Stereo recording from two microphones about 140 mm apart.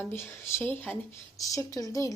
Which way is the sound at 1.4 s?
25° left (ahead or behind).